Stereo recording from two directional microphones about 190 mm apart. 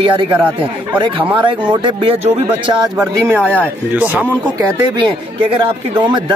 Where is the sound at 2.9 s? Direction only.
5° right (ahead or behind).